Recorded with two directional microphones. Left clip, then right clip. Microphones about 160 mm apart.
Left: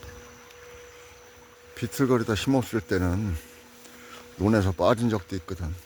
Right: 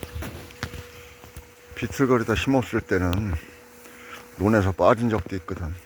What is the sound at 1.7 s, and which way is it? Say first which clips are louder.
Speech: right 3 dB; 20° left (ahead or behind).